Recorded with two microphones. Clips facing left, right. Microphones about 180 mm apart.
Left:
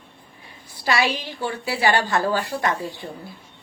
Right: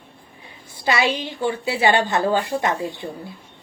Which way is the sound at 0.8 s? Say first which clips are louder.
Right 2 dB; 20° right (ahead or behind).